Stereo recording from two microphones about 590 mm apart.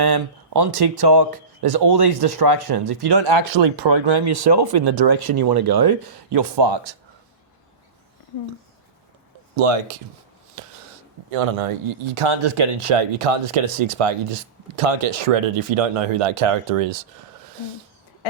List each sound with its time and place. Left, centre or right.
0.0 s speech: right
9.6 s speech: right
11.3 s speech: right